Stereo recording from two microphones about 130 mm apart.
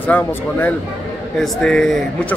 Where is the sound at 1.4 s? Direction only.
5° left (ahead or behind).